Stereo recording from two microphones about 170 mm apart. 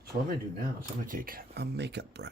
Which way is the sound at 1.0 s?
55° right (ahead or behind).